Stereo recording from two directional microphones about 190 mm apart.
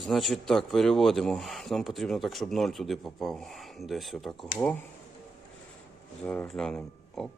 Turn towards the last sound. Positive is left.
turn(degrees=0)  # may be behind; listen again after turning